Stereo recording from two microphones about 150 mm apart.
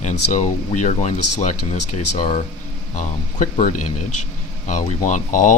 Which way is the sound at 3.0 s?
60° left (ahead or behind).